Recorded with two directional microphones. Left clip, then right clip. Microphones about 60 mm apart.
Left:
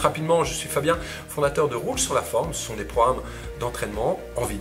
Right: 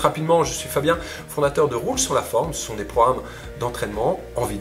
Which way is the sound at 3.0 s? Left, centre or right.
Centre.